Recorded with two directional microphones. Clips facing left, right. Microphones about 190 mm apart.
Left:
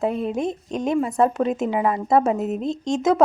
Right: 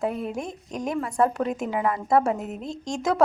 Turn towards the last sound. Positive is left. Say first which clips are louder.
# left 6 dB
turn(degrees=20)  # may be behind; listen again after turning